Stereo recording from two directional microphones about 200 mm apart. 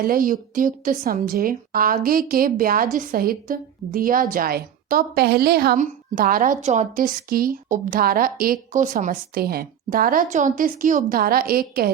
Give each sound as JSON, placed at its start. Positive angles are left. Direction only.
{"t": 0.0, "sound": "speech", "side_deg": -45}